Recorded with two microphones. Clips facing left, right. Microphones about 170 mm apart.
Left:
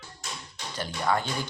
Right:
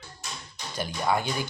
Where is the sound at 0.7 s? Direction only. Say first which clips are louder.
Right 1 dB; 10° right (ahead or behind).